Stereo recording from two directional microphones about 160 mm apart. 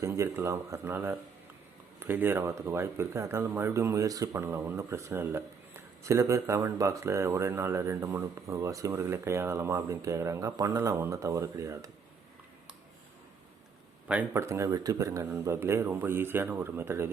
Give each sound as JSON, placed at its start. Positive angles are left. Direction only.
{"t": 0.0, "sound": "speech", "side_deg": -15}
{"t": 14.1, "sound": "speech", "side_deg": -15}